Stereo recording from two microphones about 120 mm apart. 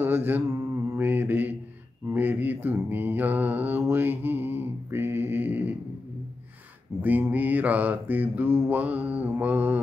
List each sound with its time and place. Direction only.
0.0 s mantra: 15° right (ahead or behind)
7.0 s mantra: 15° right (ahead or behind)